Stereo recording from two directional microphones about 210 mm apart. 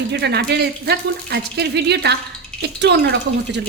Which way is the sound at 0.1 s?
55° right (ahead or behind).